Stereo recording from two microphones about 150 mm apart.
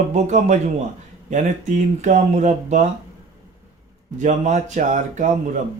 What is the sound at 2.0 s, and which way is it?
Speech, 55° right (ahead or behind).